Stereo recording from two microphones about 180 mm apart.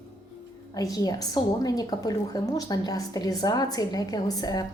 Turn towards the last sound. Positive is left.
turn(degrees=20)  # may be behind; listen again after turning